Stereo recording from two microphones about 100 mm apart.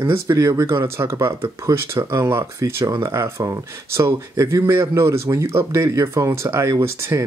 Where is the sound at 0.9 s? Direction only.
25° right (ahead or behind).